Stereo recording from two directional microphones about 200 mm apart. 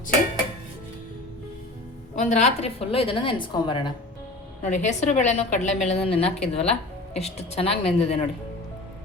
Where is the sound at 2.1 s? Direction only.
35° left (ahead or behind).